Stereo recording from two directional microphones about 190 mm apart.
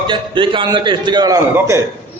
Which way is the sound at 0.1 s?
25° right (ahead or behind).